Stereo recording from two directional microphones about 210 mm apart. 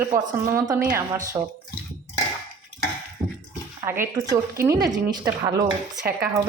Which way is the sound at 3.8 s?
10° right (ahead or behind).